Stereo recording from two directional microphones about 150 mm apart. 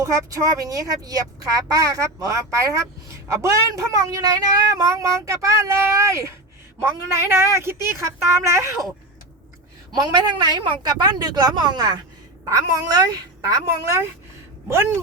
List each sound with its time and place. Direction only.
0.0 s a woman's voice: 25° right (ahead or behind)
10.0 s a woman's voice: 30° right (ahead or behind)